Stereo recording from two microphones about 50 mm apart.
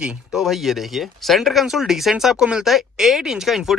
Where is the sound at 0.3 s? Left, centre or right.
Centre.